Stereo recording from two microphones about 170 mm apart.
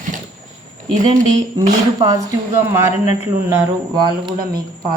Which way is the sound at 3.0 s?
40° left (ahead or behind).